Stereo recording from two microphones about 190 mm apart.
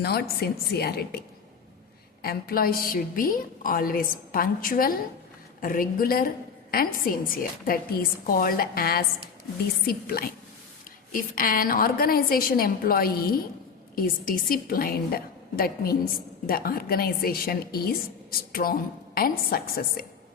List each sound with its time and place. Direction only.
0.0 s a woman's voice: 55° left (ahead or behind)
2.2 s a woman's voice: 50° left (ahead or behind)